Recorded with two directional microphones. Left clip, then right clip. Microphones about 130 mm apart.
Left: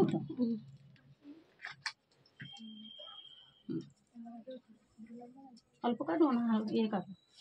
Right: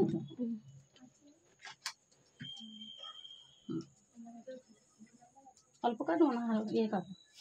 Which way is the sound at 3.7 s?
25° right (ahead or behind).